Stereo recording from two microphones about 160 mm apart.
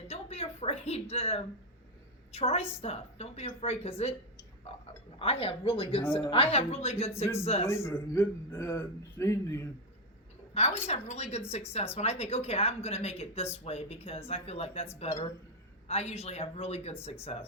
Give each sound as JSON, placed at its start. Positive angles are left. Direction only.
{"t": 0.1, "sound": "a sound", "side_deg": 40}
{"t": 2.3, "sound": "speech", "side_deg": 40}
{"t": 5.2, "sound": "speech", "side_deg": 40}
{"t": 7.7, "sound": "a man's voice", "side_deg": 15}
{"t": 10.5, "sound": "speech", "side_deg": 40}